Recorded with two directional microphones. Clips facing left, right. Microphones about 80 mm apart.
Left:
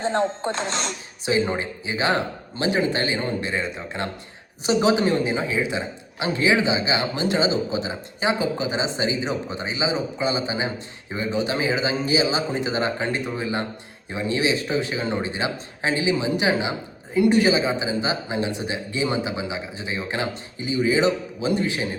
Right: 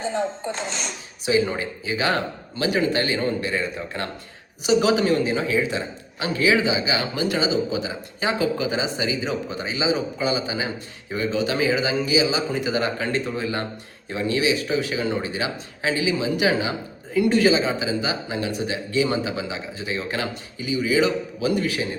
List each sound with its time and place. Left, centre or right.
0.1 s speech: left
1.2 s a man's voice: left